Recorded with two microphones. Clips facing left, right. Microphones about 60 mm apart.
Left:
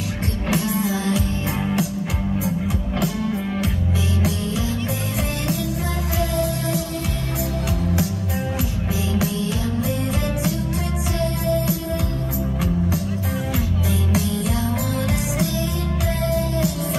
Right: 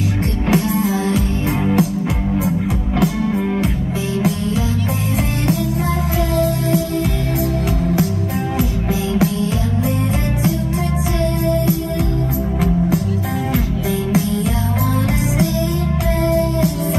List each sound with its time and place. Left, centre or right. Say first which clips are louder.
0.5 s music: right 5 dB; right
6.3 s music: right 8 dB; right
16.3 s music: right 5 dB; right